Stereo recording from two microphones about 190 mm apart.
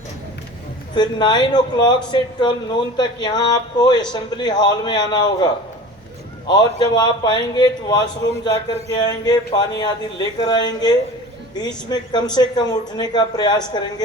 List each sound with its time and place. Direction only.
0.9 s speech: 25° left (ahead or behind)
6.5 s speech: 20° left (ahead or behind)